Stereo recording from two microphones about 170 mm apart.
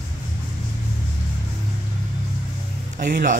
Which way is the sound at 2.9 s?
50° right (ahead or behind).